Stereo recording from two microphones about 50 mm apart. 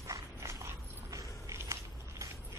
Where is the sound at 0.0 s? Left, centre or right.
Right.